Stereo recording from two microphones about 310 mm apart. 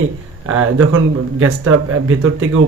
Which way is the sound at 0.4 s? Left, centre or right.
Right.